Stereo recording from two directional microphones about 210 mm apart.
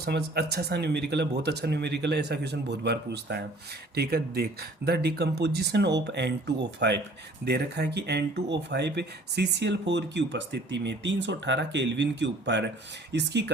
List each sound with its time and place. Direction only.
0.0 s speech: 50° right (ahead or behind)